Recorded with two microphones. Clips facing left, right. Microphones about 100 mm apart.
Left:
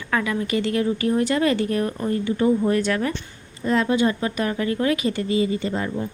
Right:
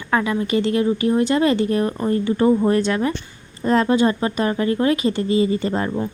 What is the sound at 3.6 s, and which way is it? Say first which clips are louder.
Speech: right 3 dB; 40° right (ahead or behind).